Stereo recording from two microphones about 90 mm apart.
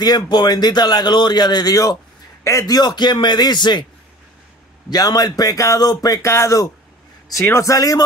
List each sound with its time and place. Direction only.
0.0 s a man's voice: 55° left (ahead or behind)
4.8 s a man's voice: 45° left (ahead or behind)
6.2 s a man's voice: 30° left (ahead or behind)